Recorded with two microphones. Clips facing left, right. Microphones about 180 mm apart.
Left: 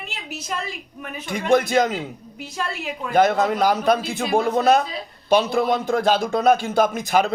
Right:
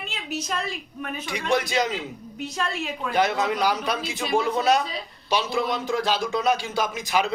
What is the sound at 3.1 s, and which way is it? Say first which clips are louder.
A man's voice: left 6 dB; 50° left (ahead or behind).